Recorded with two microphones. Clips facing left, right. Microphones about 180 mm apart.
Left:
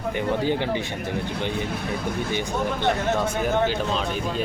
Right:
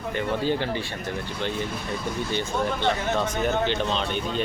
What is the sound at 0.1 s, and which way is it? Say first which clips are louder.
Speech: left 2 dB; 15° left (ahead or behind).